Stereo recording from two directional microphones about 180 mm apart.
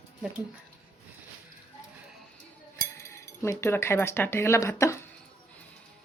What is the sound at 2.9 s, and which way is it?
Speech, 15° left (ahead or behind).